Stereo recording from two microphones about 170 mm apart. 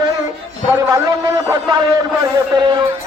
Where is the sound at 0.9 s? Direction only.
20° right (ahead or behind).